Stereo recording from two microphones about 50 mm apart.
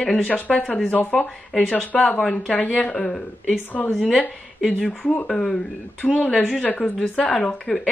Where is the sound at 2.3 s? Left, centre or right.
Left.